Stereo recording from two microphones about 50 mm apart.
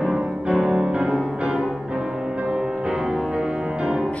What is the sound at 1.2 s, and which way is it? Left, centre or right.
Music, centre.